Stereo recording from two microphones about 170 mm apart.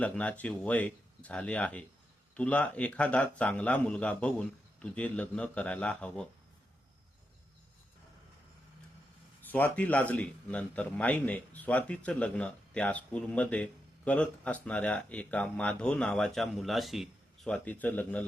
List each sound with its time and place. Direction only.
0.0 s speech: 10° left (ahead or behind)
9.4 s speech: 10° left (ahead or behind)